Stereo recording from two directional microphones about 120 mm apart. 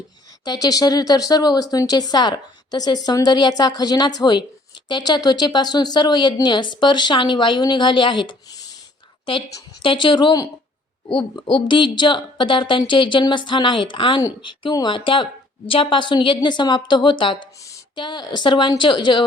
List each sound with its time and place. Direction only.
0.4 s speech: 30° left (ahead or behind)
9.8 s speech: 45° left (ahead or behind)